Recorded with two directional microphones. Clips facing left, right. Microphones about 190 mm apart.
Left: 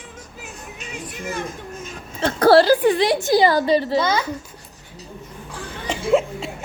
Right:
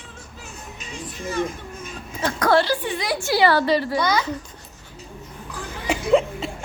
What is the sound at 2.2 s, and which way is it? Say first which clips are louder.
Speech: left 6 dB; 30° left (ahead or behind).